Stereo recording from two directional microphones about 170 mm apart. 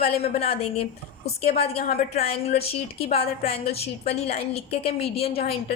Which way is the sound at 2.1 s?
35° left (ahead or behind).